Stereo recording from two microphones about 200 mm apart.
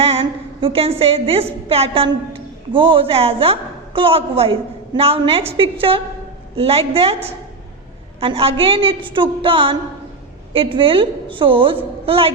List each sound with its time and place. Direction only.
0.0 s a woman's voice: 30° right (ahead or behind)
8.2 s a woman's voice: 25° right (ahead or behind)